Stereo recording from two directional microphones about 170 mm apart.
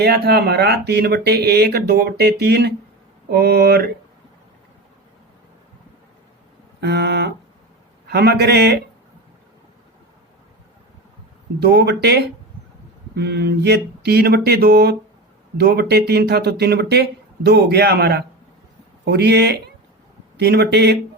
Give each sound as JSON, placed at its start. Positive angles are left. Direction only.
{"t": 0.0, "sound": "speech", "side_deg": -65}
{"t": 6.8, "sound": "speech", "side_deg": -75}
{"t": 11.6, "sound": "speech", "side_deg": -70}